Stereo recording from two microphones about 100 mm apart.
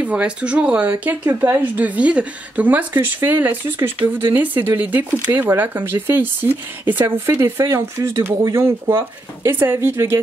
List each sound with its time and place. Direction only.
0.0 s a woman's voice: 10° right (ahead or behind)